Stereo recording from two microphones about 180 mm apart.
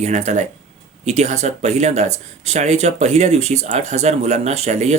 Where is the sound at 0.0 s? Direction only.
40° right (ahead or behind).